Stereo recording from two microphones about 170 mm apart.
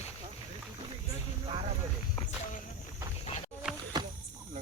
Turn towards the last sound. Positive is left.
turn(degrees=-5)  # may be behind; listen again after turning